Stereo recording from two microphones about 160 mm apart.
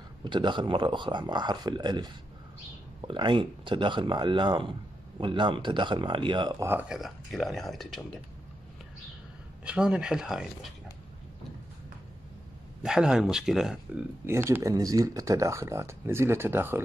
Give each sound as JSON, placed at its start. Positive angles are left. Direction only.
{"t": 0.2, "sound": "speech", "side_deg": -30}
{"t": 6.6, "sound": "speech", "side_deg": -10}
{"t": 9.7, "sound": "speech", "side_deg": -5}
{"t": 12.8, "sound": "speech", "side_deg": -5}
{"t": 14.2, "sound": "speech", "side_deg": -15}